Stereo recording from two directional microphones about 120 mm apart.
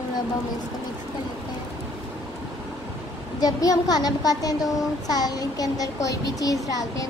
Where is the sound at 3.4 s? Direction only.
30° left (ahead or behind).